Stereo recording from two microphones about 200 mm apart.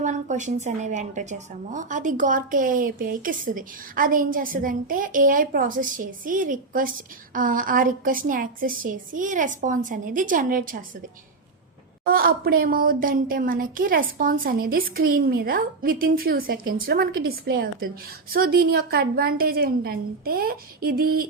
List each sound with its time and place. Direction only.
0.0 s a woman's voice: 35° right (ahead or behind)
12.0 s a woman's voice: 45° right (ahead or behind)